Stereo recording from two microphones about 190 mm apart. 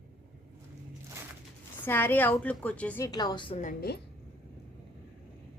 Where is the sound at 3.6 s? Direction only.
50° left (ahead or behind).